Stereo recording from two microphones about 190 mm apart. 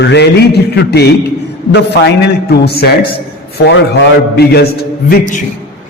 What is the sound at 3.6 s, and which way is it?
A man's voice, 65° left (ahead or behind).